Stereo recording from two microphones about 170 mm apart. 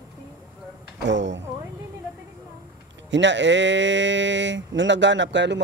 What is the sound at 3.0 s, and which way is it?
Speech, 90° right.